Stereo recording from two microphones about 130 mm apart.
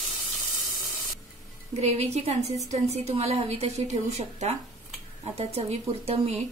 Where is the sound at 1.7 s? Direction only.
55° right (ahead or behind).